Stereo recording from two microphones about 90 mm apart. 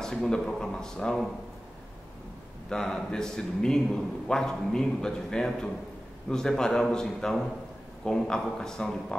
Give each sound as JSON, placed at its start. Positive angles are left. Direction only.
{"t": 0.0, "sound": "a man's voice", "side_deg": 5}
{"t": 2.7, "sound": "a man's voice", "side_deg": 5}